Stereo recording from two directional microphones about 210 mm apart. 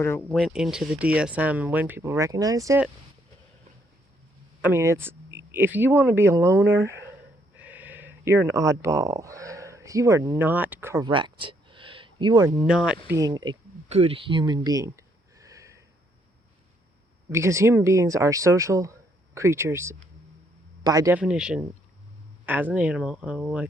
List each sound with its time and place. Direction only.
0.0 s speech: 10° left (ahead or behind); by 2.8 s 15° right (ahead or behind)
4.6 s speech: 10° right (ahead or behind)
12.5 s speech: 5° right (ahead or behind)
13.1 s speech: 15° right (ahead or behind)
17.2 s speech: 15° right (ahead or behind)